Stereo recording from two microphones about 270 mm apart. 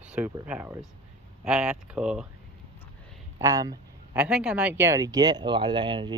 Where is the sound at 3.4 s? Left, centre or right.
Centre.